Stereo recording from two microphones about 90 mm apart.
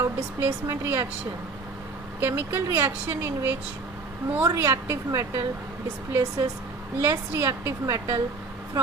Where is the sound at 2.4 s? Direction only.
25° right (ahead or behind).